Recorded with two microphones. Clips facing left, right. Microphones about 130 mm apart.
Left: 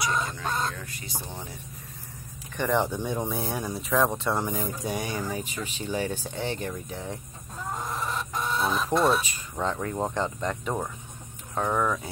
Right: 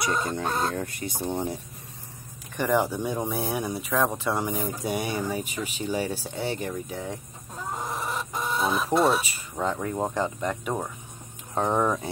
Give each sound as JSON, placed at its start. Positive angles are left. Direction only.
{"t": 0.0, "sound": "speech", "side_deg": -55}
{"t": 2.5, "sound": "speech", "side_deg": -10}
{"t": 4.6, "sound": "speech", "side_deg": -15}
{"t": 7.8, "sound": "chicken", "side_deg": -15}
{"t": 9.9, "sound": "speech", "side_deg": -5}
{"t": 11.5, "sound": "speech", "side_deg": -20}